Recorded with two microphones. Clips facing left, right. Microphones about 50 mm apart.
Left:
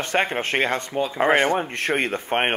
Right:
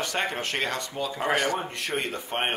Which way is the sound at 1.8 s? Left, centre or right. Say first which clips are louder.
Left 7 dB; left.